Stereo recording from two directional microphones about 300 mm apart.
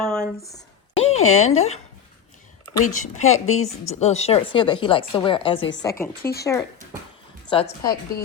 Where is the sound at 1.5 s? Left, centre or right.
Left.